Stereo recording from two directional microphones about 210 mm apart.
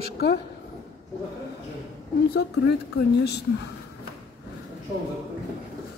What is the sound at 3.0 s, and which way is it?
Speech, 50° left (ahead or behind).